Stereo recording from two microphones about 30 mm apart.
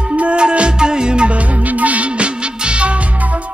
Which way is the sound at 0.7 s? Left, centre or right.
Right.